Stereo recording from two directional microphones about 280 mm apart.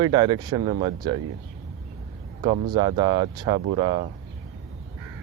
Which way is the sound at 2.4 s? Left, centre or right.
Centre.